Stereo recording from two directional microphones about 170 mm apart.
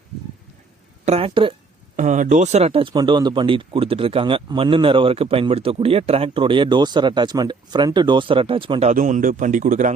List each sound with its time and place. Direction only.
1.0 s speech: 35° right (ahead or behind)
2.0 s speech: 45° right (ahead or behind); by 8.9 s 30° right (ahead or behind)
8.9 s a man's voice: 45° right (ahead or behind)